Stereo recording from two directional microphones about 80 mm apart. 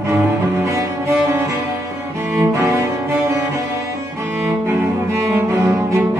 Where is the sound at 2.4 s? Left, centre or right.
Right.